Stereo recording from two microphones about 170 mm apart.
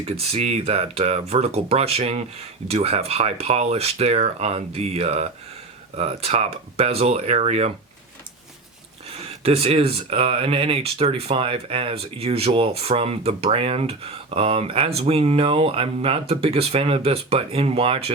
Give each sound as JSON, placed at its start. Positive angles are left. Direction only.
{"t": 0.3, "sound": "speech", "side_deg": -40}
{"t": 9.4, "sound": "speech", "side_deg": -35}